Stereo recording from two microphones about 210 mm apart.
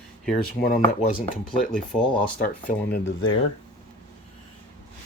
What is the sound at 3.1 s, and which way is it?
Speech, 75° left (ahead or behind).